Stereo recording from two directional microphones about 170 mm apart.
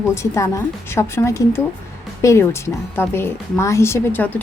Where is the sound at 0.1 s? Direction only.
15° left (ahead or behind).